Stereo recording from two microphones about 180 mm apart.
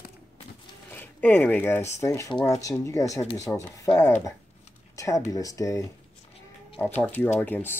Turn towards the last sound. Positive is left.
turn(degrees=10)  # may be behind; listen again after turning